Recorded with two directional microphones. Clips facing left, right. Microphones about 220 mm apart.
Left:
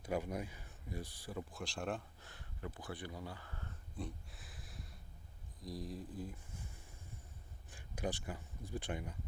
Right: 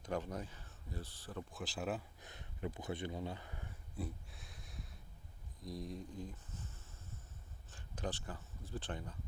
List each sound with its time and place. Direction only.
0.0 s speech: 10° left (ahead or behind)
1.5 s speech: centre (ahead or behind)
2.2 s a sound: 20° right (ahead or behind); by 4.9 s centre (ahead or behind)
5.6 s speech: centre (ahead or behind)